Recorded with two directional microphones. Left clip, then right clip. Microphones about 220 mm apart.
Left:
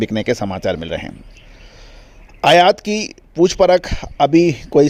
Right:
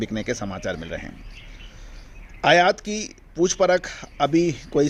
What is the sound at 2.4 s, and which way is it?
Speech, 40° left (ahead or behind).